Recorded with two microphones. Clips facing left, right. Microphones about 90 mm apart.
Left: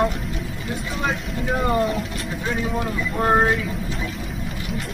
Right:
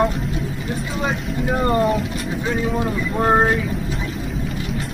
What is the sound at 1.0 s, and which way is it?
Speech, centre (ahead or behind).